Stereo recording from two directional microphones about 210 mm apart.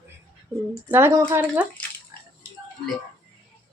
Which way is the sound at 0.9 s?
10° right (ahead or behind).